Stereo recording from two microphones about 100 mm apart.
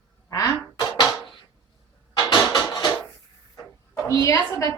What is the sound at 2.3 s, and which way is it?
Music, 40° left (ahead or behind).